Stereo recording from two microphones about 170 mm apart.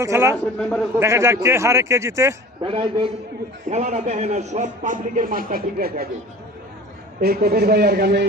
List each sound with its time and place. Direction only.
0.0 s speech: 15° right (ahead or behind)
2.6 s a man's voice: 30° right (ahead or behind)
3.7 s a man's voice: 45° right (ahead or behind); by 6.1 s 60° right (ahead or behind)
7.2 s speech: 65° right (ahead or behind)